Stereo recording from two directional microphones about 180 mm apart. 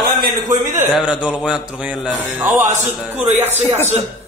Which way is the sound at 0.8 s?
5° right (ahead or behind).